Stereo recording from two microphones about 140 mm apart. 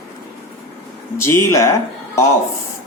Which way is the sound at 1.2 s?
15° left (ahead or behind).